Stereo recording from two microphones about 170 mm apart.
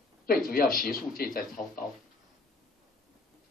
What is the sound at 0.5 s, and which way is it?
Speech, 60° left (ahead or behind).